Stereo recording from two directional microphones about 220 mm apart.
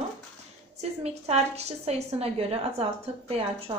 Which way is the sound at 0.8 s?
30° right (ahead or behind).